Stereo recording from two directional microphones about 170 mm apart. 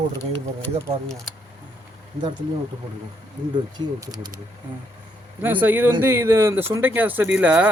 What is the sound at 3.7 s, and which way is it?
Speech, 25° right (ahead or behind).